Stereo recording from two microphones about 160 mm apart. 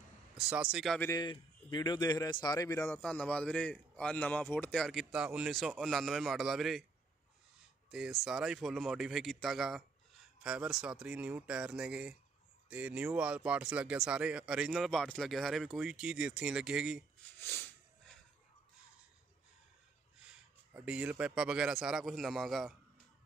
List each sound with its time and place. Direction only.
0.4 s speech: 5° right (ahead or behind)
1.1 s a man's voice: 30° left (ahead or behind)
3.0 s speech: 5° left (ahead or behind)
7.9 s speech: centre (ahead or behind)
17.4 s a sound: 15° left (ahead or behind)
20.2 s speech: 5° right (ahead or behind)